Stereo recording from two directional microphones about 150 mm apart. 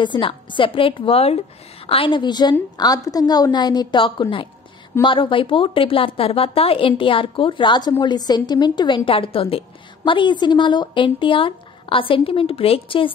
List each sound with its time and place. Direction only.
0.0 s a woman's voice: 30° left (ahead or behind)